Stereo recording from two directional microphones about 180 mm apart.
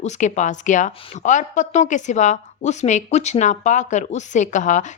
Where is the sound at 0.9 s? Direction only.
30° left (ahead or behind).